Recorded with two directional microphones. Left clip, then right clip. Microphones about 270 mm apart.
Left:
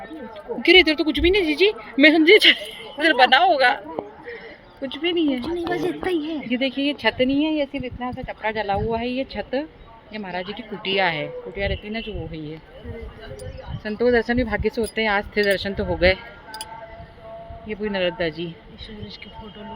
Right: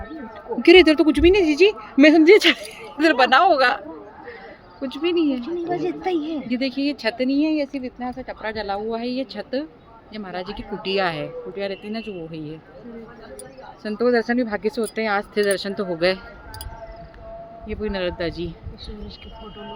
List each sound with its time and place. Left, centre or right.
0.6 s speech: right
5.0 s speech: centre
5.4 s a woman's voice: left
6.1 s speech: centre
6.5 s speech: centre
10.8 s speech: centre
13.8 s speech: centre
17.7 s speech: centre